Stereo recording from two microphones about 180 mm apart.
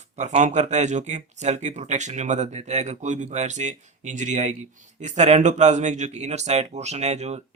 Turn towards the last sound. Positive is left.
turn(degrees=-40)  # may be behind; listen again after turning